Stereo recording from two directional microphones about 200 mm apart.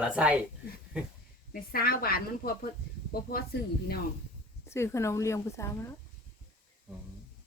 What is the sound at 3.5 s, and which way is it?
Speech, 50° left (ahead or behind).